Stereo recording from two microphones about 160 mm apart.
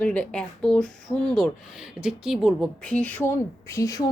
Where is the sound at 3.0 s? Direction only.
10° left (ahead or behind).